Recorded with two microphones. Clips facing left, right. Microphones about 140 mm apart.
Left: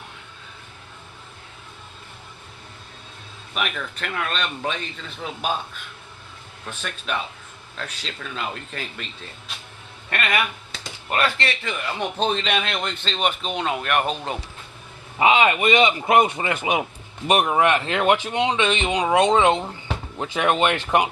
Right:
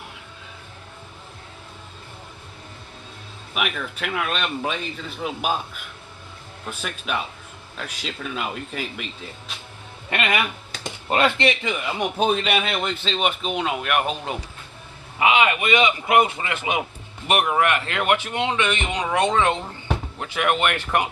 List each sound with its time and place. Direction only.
3.5 s speech: 5° right (ahead or behind)
6.7 s speech: 10° right (ahead or behind)
10.1 s speech: 20° right (ahead or behind)
15.2 s a man's voice: 30° left (ahead or behind)